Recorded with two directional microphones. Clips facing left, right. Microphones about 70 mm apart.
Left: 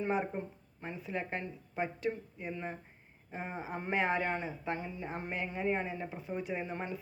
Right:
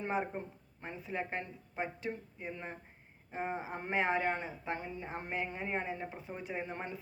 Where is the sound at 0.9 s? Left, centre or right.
Right.